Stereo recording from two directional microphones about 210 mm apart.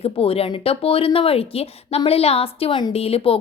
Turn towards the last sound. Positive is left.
turn(degrees=25)  # may be behind; listen again after turning